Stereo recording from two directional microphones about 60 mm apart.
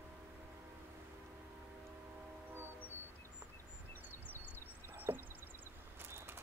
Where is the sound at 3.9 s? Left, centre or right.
Left.